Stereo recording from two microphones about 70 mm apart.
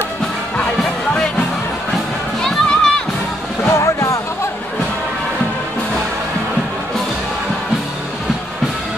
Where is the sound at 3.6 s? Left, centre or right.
Left.